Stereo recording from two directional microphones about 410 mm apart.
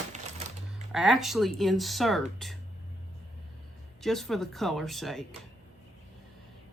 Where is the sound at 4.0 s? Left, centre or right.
Centre.